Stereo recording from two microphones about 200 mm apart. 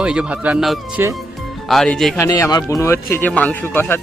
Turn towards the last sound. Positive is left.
turn(degrees=10)  # may be behind; listen again after turning